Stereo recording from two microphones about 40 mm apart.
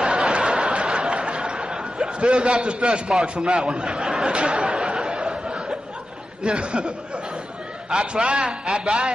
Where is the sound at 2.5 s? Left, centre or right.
Right.